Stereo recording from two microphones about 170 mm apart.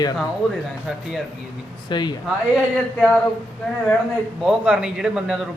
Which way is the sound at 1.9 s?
25° left (ahead or behind).